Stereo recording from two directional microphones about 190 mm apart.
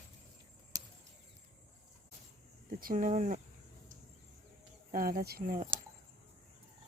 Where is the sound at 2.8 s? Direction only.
45° right (ahead or behind).